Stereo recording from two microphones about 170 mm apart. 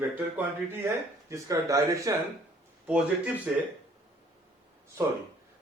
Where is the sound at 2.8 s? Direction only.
10° right (ahead or behind).